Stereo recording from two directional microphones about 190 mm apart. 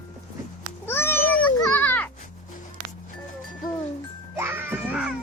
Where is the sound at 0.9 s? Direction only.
10° left (ahead or behind).